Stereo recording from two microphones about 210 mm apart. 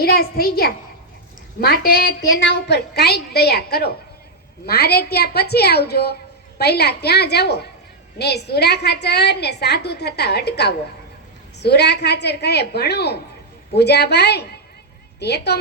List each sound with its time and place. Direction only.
0.0 s a woman's voice: 45° left (ahead or behind)